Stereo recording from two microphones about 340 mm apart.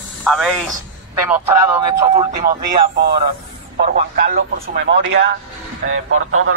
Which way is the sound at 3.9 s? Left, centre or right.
Right.